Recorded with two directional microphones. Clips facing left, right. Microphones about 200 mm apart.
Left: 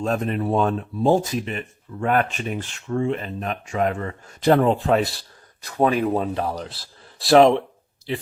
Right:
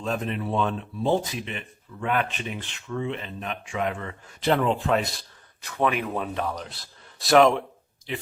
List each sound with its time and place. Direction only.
0.0 s speech: 45° left (ahead or behind)